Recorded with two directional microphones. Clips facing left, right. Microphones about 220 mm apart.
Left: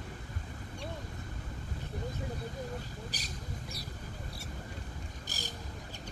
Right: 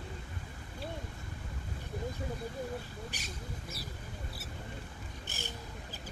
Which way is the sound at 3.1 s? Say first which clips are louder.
Left 1 dB; 35° left (ahead or behind).